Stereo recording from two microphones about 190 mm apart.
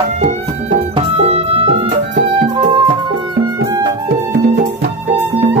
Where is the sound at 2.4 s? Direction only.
45° right (ahead or behind).